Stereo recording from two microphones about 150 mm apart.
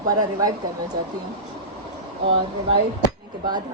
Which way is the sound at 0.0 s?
25° right (ahead or behind).